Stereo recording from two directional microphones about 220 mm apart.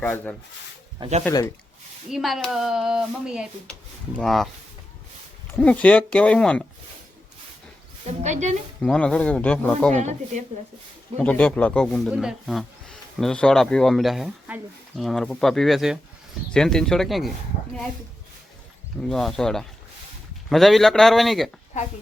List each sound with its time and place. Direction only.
0.0 s speech: 10° left (ahead or behind)
0.9 s speech: 25° right (ahead or behind)
2.0 s speech: centre (ahead or behind)
5.5 s speech: 5° left (ahead or behind)
8.2 s speech: 30° right (ahead or behind)
8.8 s speech: 5° left (ahead or behind)
9.9 s speech: 30° right (ahead or behind)
11.2 s speech: 5° left (ahead or behind)
19.0 s speech: centre (ahead or behind)